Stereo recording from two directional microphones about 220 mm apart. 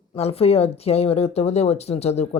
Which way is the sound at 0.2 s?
25° left (ahead or behind).